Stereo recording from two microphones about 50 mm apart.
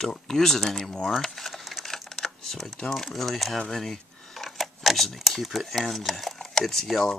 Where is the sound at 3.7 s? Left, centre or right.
Centre.